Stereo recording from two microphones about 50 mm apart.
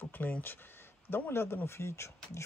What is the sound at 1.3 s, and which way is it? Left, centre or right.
Speech, left.